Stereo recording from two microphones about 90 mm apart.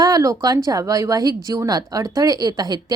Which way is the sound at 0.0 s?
40° right (ahead or behind).